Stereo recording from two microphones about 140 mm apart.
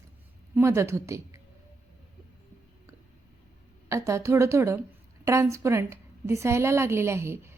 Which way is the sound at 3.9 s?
20° right (ahead or behind).